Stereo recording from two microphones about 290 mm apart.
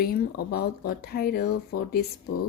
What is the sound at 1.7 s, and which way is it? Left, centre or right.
Speech, left.